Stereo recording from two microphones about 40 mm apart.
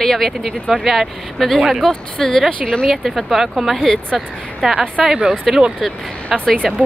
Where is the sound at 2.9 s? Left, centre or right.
Centre.